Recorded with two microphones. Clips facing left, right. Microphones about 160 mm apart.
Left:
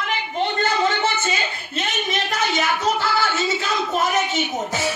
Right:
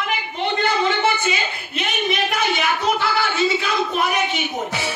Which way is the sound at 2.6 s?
45° left (ahead or behind).